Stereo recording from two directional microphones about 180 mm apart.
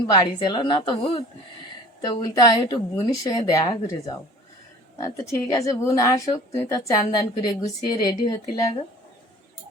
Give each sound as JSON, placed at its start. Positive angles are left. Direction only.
{"t": 0.1, "sound": "a woman's voice", "side_deg": 25}